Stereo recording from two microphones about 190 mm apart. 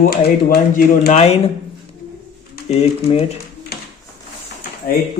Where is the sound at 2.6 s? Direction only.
30° left (ahead or behind).